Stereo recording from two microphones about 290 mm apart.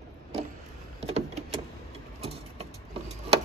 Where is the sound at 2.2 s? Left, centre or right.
Right.